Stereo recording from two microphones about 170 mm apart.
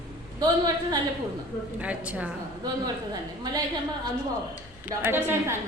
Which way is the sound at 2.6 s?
20° right (ahead or behind).